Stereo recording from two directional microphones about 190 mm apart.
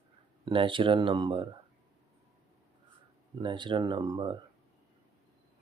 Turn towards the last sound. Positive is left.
turn(degrees=-25)  # may be behind; listen again after turning